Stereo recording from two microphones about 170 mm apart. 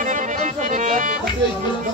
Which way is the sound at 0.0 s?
50° right (ahead or behind).